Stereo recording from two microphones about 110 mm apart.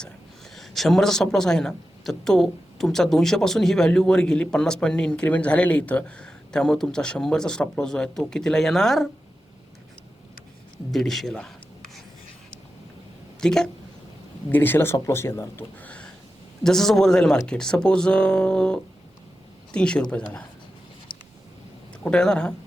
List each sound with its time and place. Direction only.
0.5 s speech: centre (ahead or behind)
10.9 s speech: centre (ahead or behind)
13.4 s a woman's voice: 5° left (ahead or behind)
14.5 s speech: 20° left (ahead or behind)
22.0 s speech: 5° left (ahead or behind)